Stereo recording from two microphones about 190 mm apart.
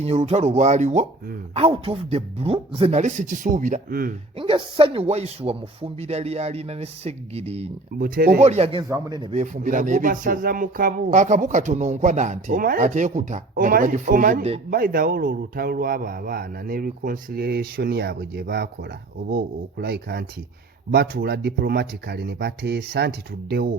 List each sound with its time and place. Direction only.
0.0 s speech: 35° right (ahead or behind)
4.4 s speech: 30° right (ahead or behind)
7.9 s a man's voice: 50° right (ahead or behind)
8.4 s speech: 35° right (ahead or behind)
8.9 s a man's voice: 20° right (ahead or behind)
9.3 s a man's voice: 40° right (ahead or behind); by 23.7 s 55° right (ahead or behind)